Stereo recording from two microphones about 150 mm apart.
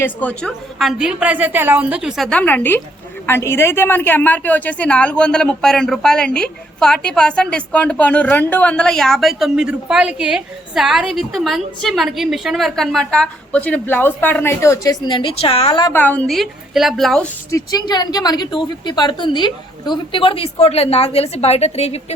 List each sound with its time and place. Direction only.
0.0 s a woman's voice: 10° left (ahead or behind)
0.8 s a woman's voice: 5° right (ahead or behind); by 14.9 s 20° left (ahead or behind)
15.0 s a woman's voice: 35° left (ahead or behind)
15.9 s a woman's voice: 10° left (ahead or behind)
17.5 s a woman's voice: 25° left (ahead or behind); by 22.0 s 45° left (ahead or behind)